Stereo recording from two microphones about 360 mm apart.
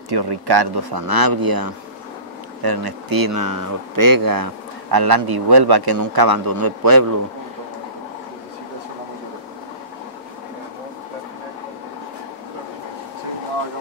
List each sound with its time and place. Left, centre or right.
0.1 s speech: right
4.9 s a man's voice: right
5.9 s speech: right